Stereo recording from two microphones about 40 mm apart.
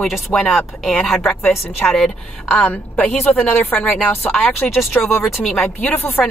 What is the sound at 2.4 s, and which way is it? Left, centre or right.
Speech, left.